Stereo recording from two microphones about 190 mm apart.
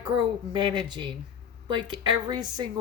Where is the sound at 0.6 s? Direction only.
25° right (ahead or behind).